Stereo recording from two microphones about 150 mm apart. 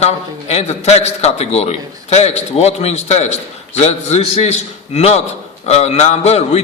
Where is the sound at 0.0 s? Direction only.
45° left (ahead or behind).